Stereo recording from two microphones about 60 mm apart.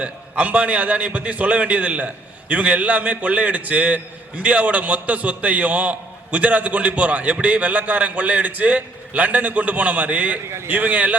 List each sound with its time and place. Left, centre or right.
0.0 s a man's voice: right